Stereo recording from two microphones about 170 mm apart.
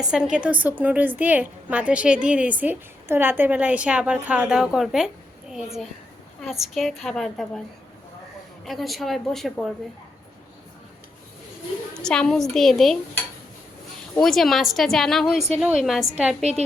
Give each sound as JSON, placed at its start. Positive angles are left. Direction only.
{"t": 0.1, "sound": "a woman's voice", "side_deg": -5}
{"t": 8.6, "sound": "speech", "side_deg": 0}
{"t": 11.9, "sound": "speech", "side_deg": 5}
{"t": 16.4, "sound": "a woman's voice", "side_deg": -40}